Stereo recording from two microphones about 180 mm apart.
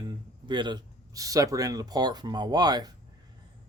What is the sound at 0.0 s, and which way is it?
Speech, 25° right (ahead or behind).